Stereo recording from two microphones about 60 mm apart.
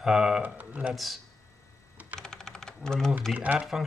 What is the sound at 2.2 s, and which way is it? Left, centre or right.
Typing, centre.